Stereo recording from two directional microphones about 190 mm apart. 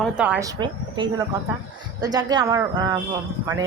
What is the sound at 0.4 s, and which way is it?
Speech, 25° right (ahead or behind).